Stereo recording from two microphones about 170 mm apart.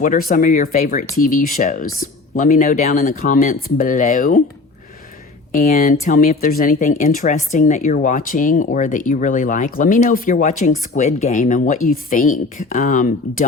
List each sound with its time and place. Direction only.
0.0 s speech: 55° left (ahead or behind)
5.5 s speech: 55° left (ahead or behind)